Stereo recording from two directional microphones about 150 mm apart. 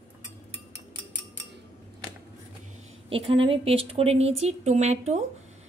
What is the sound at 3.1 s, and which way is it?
Speech, 40° right (ahead or behind).